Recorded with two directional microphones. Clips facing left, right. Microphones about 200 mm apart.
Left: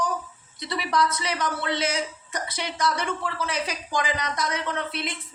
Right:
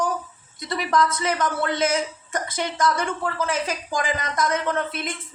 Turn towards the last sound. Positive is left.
turn(degrees=-50)  # may be behind; listen again after turning